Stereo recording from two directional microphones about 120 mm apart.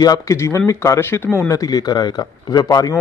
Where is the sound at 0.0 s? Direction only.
30° left (ahead or behind).